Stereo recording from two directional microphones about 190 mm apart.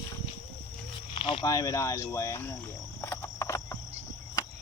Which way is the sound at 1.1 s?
25° left (ahead or behind).